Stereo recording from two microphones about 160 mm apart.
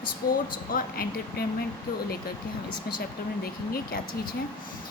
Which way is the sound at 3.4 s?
70° left (ahead or behind).